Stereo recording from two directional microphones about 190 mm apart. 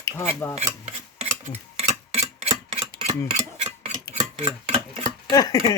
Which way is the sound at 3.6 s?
35° right (ahead or behind).